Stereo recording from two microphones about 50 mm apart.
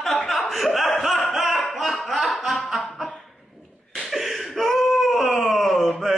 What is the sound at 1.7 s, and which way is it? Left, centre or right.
Music, centre.